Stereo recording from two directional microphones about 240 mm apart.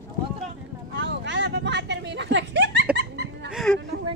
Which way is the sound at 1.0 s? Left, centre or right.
Right.